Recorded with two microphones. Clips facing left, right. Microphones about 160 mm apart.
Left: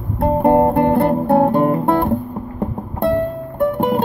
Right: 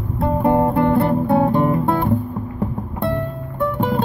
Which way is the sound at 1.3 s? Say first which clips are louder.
Left 3 dB; 50° left (ahead or behind).